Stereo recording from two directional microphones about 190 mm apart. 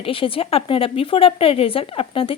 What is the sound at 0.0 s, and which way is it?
A woman's voice, 30° left (ahead or behind).